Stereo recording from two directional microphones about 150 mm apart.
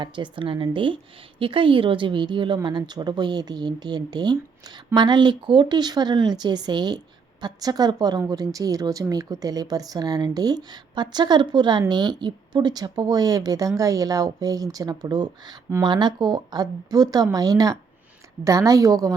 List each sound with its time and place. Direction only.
0.0 s a woman's voice: 35° right (ahead or behind)